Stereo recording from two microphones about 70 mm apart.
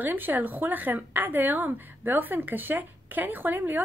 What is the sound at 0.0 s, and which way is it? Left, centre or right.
A woman's voice, right.